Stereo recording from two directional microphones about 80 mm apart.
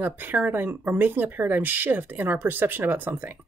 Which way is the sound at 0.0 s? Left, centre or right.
Right.